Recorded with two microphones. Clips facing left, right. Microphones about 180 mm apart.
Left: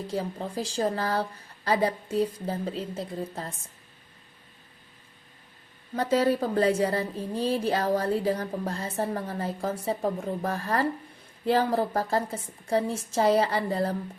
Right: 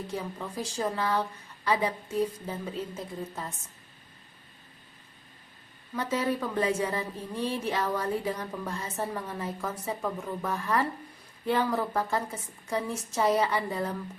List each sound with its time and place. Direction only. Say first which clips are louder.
0.1 s a woman's voice: left 4 dB; 35° left (ahead or behind)
6.1 s a woman's voice: left 5 dB; 35° left (ahead or behind)